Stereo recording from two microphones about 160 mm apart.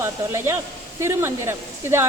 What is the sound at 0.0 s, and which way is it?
Speech, 15° right (ahead or behind).